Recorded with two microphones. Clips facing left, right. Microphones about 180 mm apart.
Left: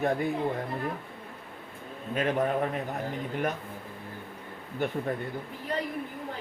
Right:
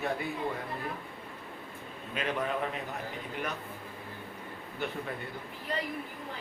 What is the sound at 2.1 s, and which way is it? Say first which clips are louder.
Speech: left 6 dB; 45° left (ahead or behind).